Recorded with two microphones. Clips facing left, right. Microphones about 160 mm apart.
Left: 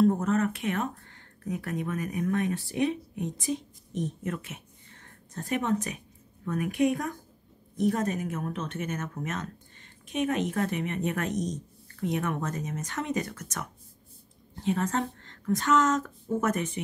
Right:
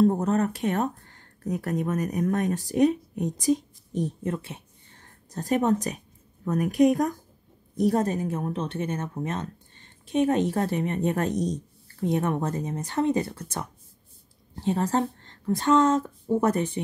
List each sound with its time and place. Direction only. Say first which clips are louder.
0.0 s speech: right 2 dB; 35° right (ahead or behind)